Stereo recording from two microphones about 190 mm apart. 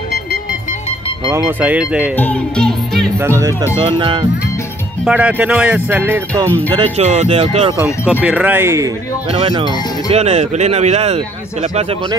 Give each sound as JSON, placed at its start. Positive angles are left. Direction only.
{"t": 1.3, "sound": "speech", "side_deg": -10}
{"t": 2.1, "sound": "speech", "side_deg": 10}
{"t": 3.2, "sound": "speech", "side_deg": -15}
{"t": 3.7, "sound": "speech", "side_deg": -25}
{"t": 5.0, "sound": "speech", "side_deg": -5}
{"t": 6.4, "sound": "speech", "side_deg": 10}
{"t": 6.8, "sound": "speech", "side_deg": -35}
{"t": 8.2, "sound": "speech", "side_deg": -10}
{"t": 9.3, "sound": "speech", "side_deg": -30}